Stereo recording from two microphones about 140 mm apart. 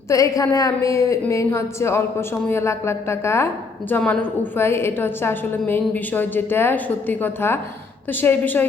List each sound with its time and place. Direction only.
0.1 s a woman's voice: 25° left (ahead or behind)